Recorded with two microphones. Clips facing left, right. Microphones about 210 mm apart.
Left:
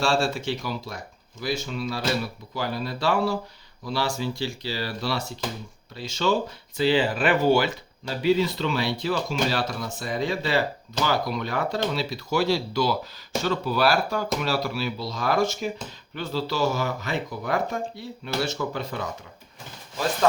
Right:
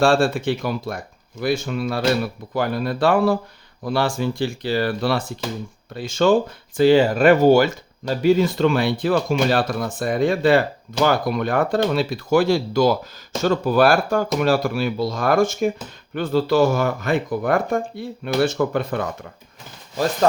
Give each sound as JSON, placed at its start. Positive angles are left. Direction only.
{"t": 0.0, "sound": "speech", "side_deg": -55}